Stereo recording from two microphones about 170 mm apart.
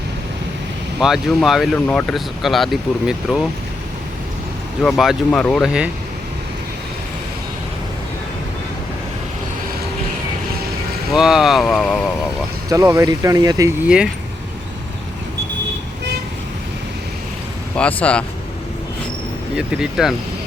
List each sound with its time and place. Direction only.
0.9 s speech: centre (ahead or behind)
4.8 s speech: centre (ahead or behind)
11.1 s speech: centre (ahead or behind)
12.7 s speech: 20° right (ahead or behind)
13.8 s speech: 5° right (ahead or behind)
17.7 s speech: 5° left (ahead or behind)
19.5 s speech: 5° right (ahead or behind)